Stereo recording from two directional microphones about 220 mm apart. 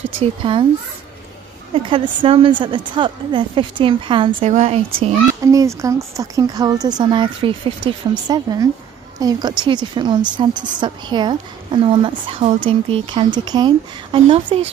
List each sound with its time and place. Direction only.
0.2 s a woman's voice: 25° right (ahead or behind)
1.9 s a woman's voice: 25° right (ahead or behind)
5.4 s a woman's voice: 15° right (ahead or behind)